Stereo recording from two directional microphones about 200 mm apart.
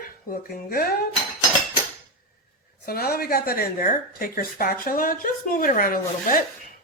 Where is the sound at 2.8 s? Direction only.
50° left (ahead or behind).